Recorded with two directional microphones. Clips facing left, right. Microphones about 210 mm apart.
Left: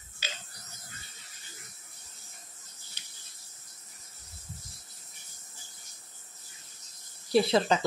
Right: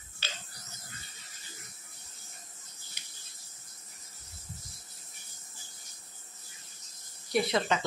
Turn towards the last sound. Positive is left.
turn(degrees=30)  # may be behind; listen again after turning